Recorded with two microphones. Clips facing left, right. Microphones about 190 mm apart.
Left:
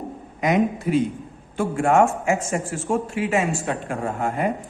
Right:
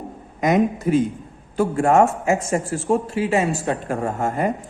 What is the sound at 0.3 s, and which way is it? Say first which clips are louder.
A man's voice: right 2 dB; 45° right (ahead or behind).